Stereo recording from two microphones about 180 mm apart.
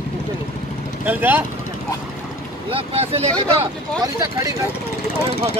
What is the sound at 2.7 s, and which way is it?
Speech, 35° right (ahead or behind).